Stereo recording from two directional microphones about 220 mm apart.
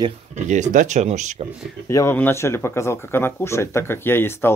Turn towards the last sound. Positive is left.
turn(degrees=10)  # may be behind; listen again after turning